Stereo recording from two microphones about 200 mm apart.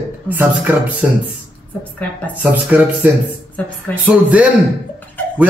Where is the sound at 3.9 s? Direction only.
10° left (ahead or behind).